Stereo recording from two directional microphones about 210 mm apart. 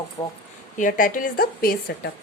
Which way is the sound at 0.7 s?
40° left (ahead or behind).